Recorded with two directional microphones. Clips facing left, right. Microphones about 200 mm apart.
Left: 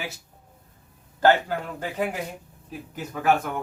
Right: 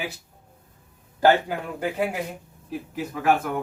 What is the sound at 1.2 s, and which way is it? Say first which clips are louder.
Speech: right 1 dB; 10° right (ahead or behind).